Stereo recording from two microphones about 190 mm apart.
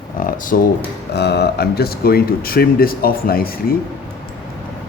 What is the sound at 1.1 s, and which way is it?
Speech, 60° left (ahead or behind).